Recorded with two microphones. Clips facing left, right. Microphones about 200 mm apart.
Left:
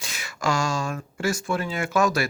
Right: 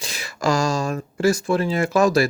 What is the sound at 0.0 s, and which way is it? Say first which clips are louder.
Speech: right 4 dB; 35° right (ahead or behind).